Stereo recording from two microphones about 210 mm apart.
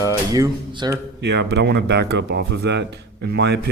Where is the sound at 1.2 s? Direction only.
55° right (ahead or behind).